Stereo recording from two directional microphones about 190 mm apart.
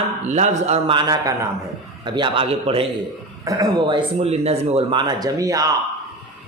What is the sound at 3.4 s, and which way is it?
Speech, 20° right (ahead or behind).